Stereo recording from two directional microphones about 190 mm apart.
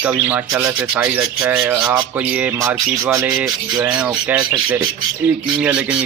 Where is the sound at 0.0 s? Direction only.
10° right (ahead or behind).